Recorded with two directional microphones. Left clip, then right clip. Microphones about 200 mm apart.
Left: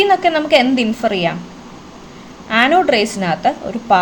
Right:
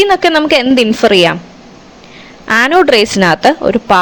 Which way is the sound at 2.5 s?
50° right (ahead or behind).